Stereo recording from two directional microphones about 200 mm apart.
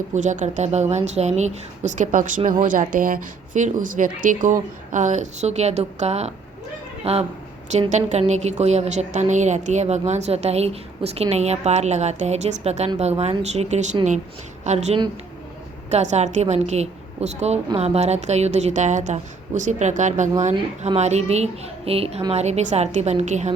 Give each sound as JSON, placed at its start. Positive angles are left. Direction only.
{"t": 0.1, "sound": "a woman's voice", "side_deg": -40}